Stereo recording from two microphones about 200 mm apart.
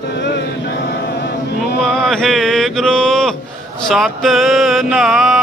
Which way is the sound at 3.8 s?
Centre (ahead or behind).